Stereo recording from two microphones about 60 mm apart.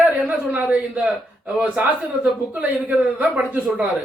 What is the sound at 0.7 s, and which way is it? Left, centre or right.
Speech, centre.